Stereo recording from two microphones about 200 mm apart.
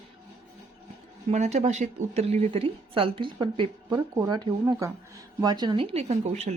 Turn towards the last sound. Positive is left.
turn(degrees=-35)  # may be behind; listen again after turning